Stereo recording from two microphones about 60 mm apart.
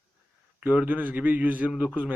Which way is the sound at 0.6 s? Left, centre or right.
Right.